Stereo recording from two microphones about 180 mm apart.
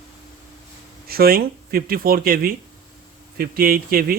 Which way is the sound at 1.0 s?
55° right (ahead or behind).